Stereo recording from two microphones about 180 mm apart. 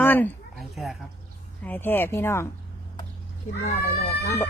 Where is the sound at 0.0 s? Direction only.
10° left (ahead or behind).